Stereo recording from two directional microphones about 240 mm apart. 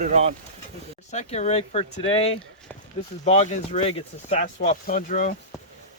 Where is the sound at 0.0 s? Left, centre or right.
Right.